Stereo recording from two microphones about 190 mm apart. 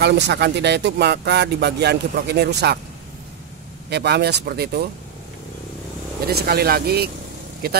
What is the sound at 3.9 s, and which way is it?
Speech, 60° right (ahead or behind).